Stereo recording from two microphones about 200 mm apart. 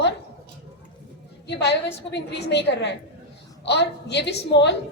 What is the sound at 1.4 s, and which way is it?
A woman's voice, 60° left (ahead or behind).